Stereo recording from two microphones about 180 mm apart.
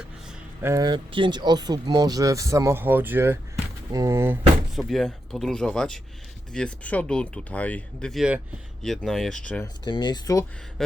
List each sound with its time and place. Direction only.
0.6 s speech: 20° right (ahead or behind)
4.7 s speech: centre (ahead or behind)
9.8 s speech: 25° left (ahead or behind)
10.8 s speech: 5° left (ahead or behind)